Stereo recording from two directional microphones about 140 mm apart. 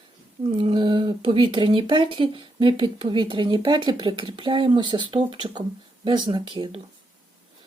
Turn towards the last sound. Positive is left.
turn(degrees=-35)  # may be behind; listen again after turning